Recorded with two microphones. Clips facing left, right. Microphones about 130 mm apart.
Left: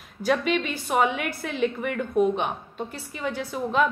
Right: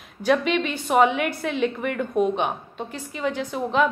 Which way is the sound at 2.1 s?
15° right (ahead or behind).